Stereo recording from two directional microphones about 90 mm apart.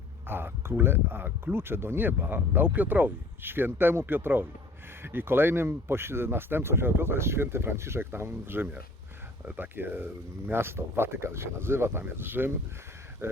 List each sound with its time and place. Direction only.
0.3 s speech: 25° right (ahead or behind)